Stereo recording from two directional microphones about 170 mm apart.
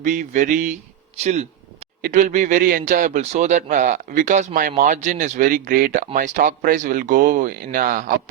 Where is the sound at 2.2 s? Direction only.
45° right (ahead or behind).